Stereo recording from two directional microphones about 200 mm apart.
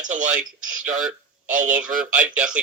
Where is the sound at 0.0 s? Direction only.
40° right (ahead or behind).